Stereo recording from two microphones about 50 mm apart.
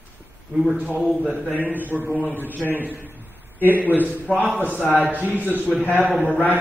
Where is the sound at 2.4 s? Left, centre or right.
Left.